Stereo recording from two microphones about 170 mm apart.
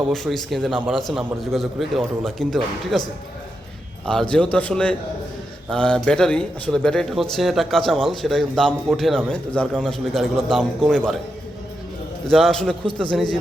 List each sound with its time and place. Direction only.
0.1 s speech: centre (ahead or behind)
4.0 s a man's voice: 5° left (ahead or behind)
12.3 s speech: centre (ahead or behind)